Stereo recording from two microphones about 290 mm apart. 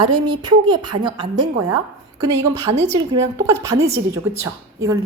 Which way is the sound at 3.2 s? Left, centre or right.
Centre.